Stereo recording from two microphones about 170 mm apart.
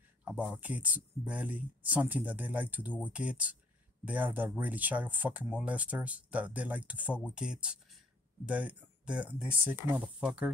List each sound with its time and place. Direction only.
0.2 s speech: 5° right (ahead or behind)